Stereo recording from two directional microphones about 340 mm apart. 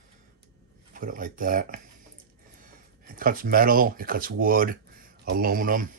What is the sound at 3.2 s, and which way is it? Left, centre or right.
Speech, right.